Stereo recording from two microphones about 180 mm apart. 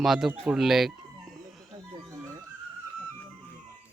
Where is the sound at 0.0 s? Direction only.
Centre (ahead or behind).